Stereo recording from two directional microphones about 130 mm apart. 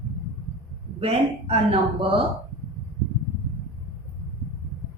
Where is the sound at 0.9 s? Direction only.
50° right (ahead or behind).